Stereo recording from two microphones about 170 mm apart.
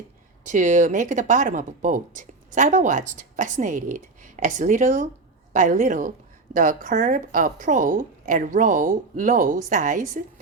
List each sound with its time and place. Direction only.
0.4 s speech: 45° right (ahead or behind)